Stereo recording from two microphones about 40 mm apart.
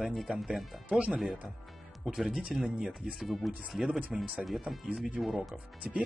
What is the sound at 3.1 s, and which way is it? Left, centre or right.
Speech, centre.